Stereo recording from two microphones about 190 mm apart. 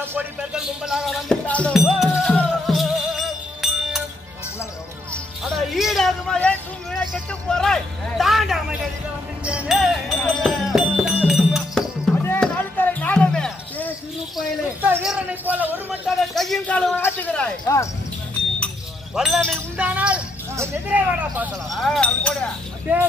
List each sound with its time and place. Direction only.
0.0 s music: 10° right (ahead or behind)
5.1 s music: centre (ahead or behind)
12.2 s a sound: 10° left (ahead or behind)
14.8 s a man's voice: 5° right (ahead or behind); by 17.8 s 10° left (ahead or behind)
19.1 s speech: centre (ahead or behind)
22.9 s speech: 10° right (ahead or behind)